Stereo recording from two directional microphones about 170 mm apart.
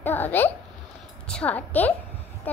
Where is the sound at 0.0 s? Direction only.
10° left (ahead or behind).